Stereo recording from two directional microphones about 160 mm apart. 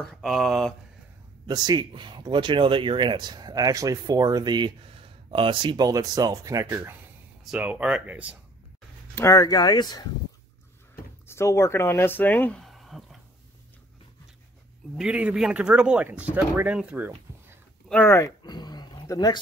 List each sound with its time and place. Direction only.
0.0 s speech: centre (ahead or behind)
1.5 s speech: 25° right (ahead or behind); by 8.4 s 10° right (ahead or behind)
9.1 s speech: 20° left (ahead or behind)
11.2 s speech: 15° left (ahead or behind); by 13.2 s centre (ahead or behind)
15.0 s speech: 5° right (ahead or behind)
17.8 s speech: 10° left (ahead or behind)
18.4 s dog: 25° left (ahead or behind)